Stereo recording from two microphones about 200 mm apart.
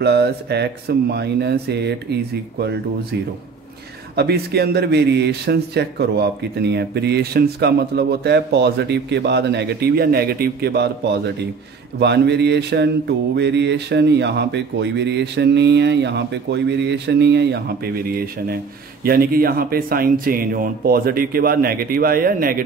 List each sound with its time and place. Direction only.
0.0 s speech: 55° right (ahead or behind)
4.1 s speech: 55° right (ahead or behind)